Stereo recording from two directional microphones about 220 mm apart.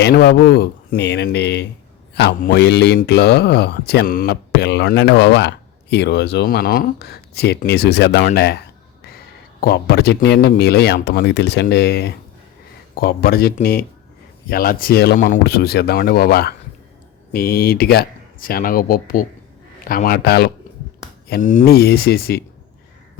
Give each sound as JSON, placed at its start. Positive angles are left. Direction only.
{"t": 0.0, "sound": "speech", "side_deg": 50}
{"t": 9.6, "sound": "speech", "side_deg": 45}